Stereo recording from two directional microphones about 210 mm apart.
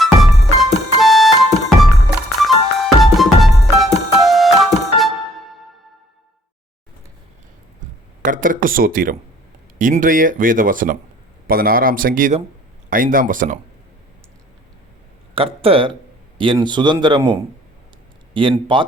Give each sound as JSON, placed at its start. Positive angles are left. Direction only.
{"t": 0.0, "sound": "music", "side_deg": 0}
{"t": 8.2, "sound": "a man's voice", "side_deg": -40}
{"t": 15.4, "sound": "a man's voice", "side_deg": -25}
{"t": 18.3, "sound": "a man's voice", "side_deg": -25}